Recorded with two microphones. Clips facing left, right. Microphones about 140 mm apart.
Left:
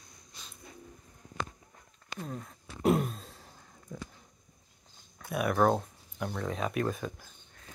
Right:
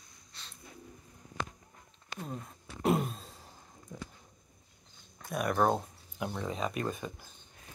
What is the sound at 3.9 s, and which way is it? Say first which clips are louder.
Speech: left 2 dB; 20° right (ahead or behind).